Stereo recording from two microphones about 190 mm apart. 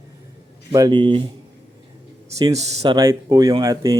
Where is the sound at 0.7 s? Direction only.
20° right (ahead or behind).